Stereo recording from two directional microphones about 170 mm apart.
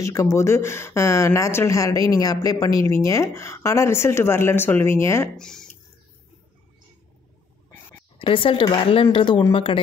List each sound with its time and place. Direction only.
0.0 s speech: 15° left (ahead or behind)
5.4 s speech: 5° left (ahead or behind)
8.2 s speech: 30° left (ahead or behind)